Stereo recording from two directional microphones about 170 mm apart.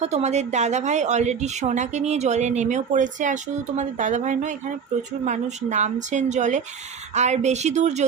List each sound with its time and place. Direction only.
0.0 s a woman's voice: 40° right (ahead or behind)